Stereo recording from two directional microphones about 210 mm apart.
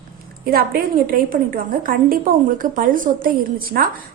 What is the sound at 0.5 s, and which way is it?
A woman's voice, 45° right (ahead or behind).